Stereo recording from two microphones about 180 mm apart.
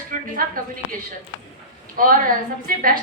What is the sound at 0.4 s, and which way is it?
Speech, 50° right (ahead or behind).